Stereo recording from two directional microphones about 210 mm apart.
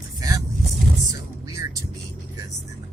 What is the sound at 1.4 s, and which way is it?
Speech, 15° right (ahead or behind).